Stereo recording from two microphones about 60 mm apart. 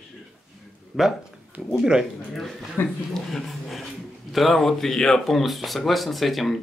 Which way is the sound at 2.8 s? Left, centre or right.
Left.